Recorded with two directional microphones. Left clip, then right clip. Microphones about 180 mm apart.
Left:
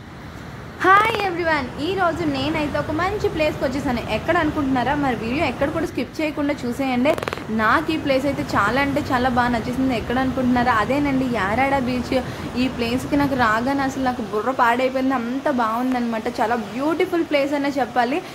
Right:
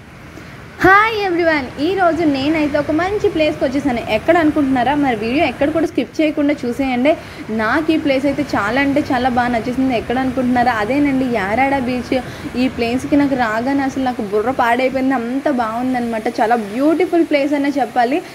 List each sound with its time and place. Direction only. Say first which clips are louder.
0.8 s a woman's voice: right 4 dB; 25° right (ahead or behind); by 18.2 s 10° right (ahead or behind)